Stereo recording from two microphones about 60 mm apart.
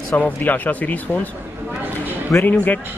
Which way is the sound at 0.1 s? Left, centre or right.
Left.